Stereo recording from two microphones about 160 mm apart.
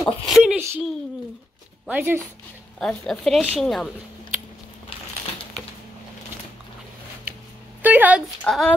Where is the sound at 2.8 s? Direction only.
5° left (ahead or behind).